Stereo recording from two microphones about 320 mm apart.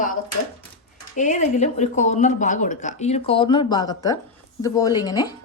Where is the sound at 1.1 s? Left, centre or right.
Left.